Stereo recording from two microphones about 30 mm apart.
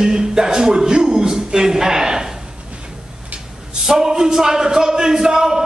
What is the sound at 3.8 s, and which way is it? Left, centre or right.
A man's voice, centre.